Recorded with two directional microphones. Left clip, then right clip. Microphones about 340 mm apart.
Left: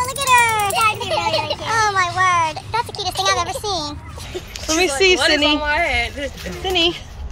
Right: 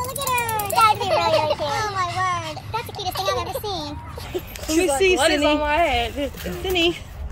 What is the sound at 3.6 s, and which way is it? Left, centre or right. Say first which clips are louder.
Speech: left 5 dB; centre.